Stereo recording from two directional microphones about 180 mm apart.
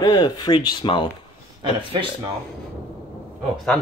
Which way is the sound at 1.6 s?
30° right (ahead or behind).